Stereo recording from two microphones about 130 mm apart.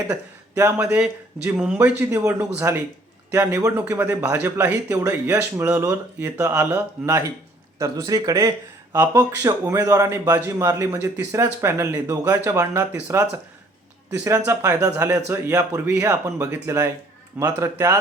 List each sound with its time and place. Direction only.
0.1 s speech: 20° right (ahead or behind)
0.8 s a man's voice: 10° right (ahead or behind)
7.8 s a man's voice: 30° right (ahead or behind)